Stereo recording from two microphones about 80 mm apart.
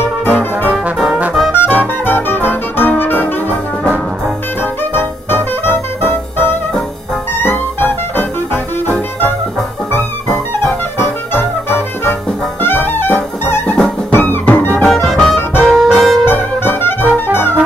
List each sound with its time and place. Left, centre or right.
0.9 s brass instrument: centre
1.5 s music: left
4.9 s music: left
10.6 s music: left
14.7 s music: centre
16.3 s music: left